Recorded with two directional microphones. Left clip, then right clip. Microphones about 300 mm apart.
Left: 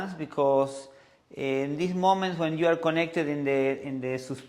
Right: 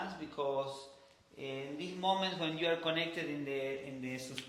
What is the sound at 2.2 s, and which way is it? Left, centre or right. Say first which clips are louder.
A man's voice: left 9 dB; left.